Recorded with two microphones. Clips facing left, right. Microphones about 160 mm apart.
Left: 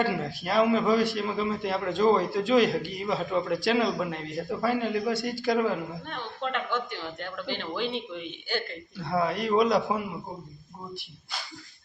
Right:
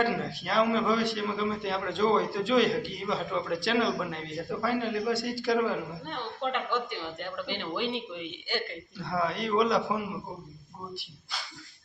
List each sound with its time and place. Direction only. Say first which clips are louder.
0.4 s a man's voice: left 3 dB; 5° left (ahead or behind)
6.1 s speech: right 2 dB; 20° right (ahead or behind)
9.0 s a man's voice: left 3 dB; 5° left (ahead or behind)